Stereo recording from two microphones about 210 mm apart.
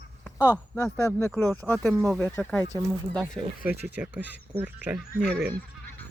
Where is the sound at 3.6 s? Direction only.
10° right (ahead or behind).